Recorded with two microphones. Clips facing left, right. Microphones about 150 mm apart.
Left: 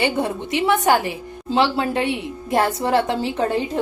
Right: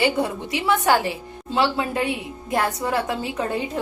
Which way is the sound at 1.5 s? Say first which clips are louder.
Left 3 dB; 30° left (ahead or behind).